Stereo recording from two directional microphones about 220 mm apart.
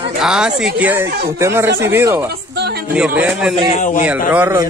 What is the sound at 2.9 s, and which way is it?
Speech, 5° right (ahead or behind).